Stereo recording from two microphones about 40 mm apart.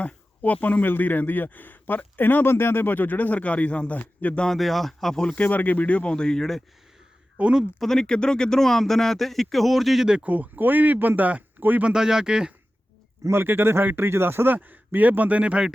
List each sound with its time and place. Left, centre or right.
0.0 s speech: left
4.4 s speech: centre
5.3 s speech: left
6.1 s speech: centre
7.4 s speech: right
7.9 s speech: left; by 10.1 s centre
10.2 s speech: right
11.2 s speech: right
11.9 s speech: centre
13.3 s speech: right
14.5 s speech: right